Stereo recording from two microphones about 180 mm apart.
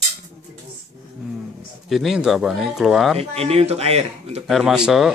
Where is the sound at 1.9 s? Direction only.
Centre (ahead or behind).